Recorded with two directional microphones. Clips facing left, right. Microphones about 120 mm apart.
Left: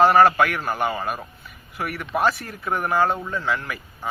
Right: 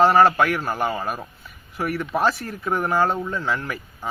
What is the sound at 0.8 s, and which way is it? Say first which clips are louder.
Speech: left 2 dB; centre (ahead or behind).